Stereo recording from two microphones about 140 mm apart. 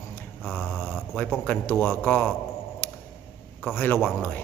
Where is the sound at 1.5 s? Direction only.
15° left (ahead or behind).